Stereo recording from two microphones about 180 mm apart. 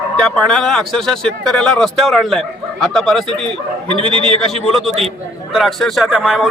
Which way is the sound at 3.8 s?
30° right (ahead or behind).